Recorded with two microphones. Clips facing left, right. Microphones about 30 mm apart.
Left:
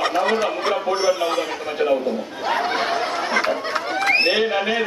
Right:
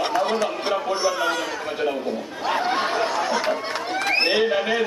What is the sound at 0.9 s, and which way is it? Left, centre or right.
Speech, left.